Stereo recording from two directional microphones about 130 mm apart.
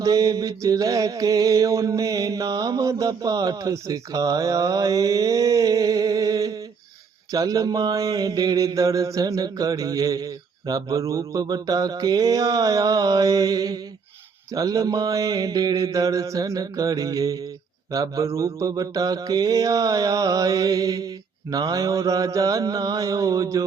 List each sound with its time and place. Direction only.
0.0 s mantra: 25° right (ahead or behind)